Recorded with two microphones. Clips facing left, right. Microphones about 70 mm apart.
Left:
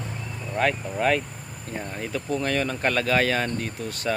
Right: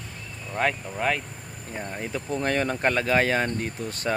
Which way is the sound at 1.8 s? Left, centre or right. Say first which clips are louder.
Even; centre.